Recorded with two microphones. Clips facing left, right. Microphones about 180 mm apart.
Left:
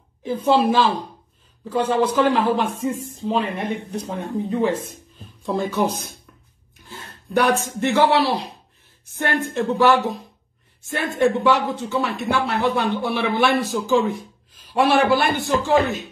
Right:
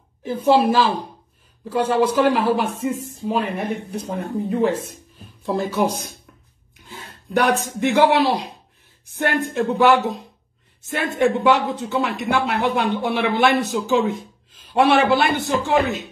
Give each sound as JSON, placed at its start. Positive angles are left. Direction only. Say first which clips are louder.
{"t": 0.2, "sound": "speech", "louder": "right 1 dB", "side_deg": -10}
{"t": 11.3, "sound": "speech", "louder": "right 1 dB", "side_deg": -20}